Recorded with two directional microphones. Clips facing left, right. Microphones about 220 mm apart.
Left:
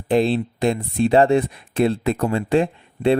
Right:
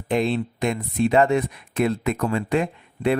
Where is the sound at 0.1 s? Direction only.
35° left (ahead or behind).